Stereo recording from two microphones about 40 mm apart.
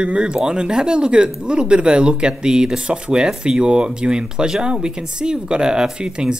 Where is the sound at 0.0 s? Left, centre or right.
Right.